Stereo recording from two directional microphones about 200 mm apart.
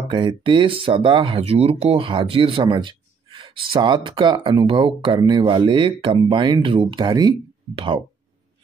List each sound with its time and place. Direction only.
0.1 s speech: 25° right (ahead or behind)